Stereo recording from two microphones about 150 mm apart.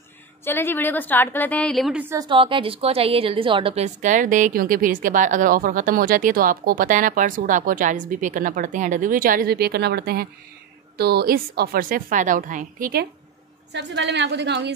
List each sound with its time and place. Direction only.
0.5 s a woman's voice: 15° left (ahead or behind)
2.1 s a woman's voice: 35° right (ahead or behind); by 13.0 s 65° right (ahead or behind)